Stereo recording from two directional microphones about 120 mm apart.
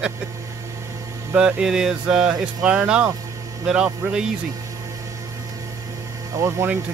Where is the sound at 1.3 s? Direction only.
10° right (ahead or behind).